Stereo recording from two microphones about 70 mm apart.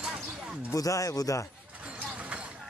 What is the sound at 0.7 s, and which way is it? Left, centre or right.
Speech, left.